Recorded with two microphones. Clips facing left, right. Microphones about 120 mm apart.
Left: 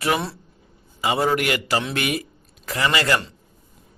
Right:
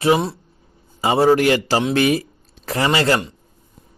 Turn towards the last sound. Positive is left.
turn(degrees=-30)  # may be behind; listen again after turning